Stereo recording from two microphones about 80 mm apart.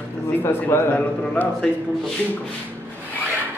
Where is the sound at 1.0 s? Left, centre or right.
Centre.